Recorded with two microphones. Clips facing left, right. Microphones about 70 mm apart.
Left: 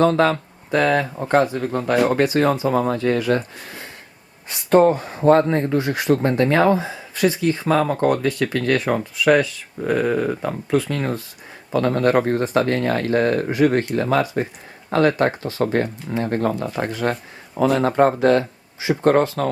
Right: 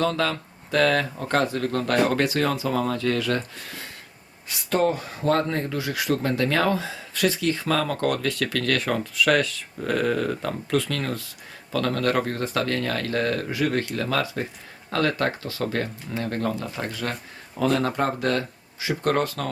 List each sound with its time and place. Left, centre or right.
0.0 s speech: left; by 2.2 s centre
2.2 s speech: left